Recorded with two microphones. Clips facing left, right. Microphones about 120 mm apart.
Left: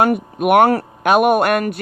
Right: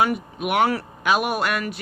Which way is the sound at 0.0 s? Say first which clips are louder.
Left 6 dB; 50° left (ahead or behind).